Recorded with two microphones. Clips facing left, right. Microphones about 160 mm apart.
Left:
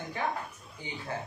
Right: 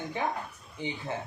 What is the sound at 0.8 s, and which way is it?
Speech, 25° right (ahead or behind).